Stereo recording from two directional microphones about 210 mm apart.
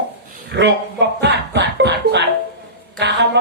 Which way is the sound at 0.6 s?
55° right (ahead or behind).